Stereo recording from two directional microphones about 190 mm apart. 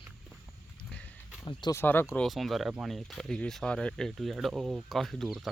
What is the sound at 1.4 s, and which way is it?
Speech, 20° left (ahead or behind).